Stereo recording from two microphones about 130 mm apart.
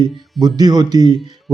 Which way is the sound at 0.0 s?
30° right (ahead or behind).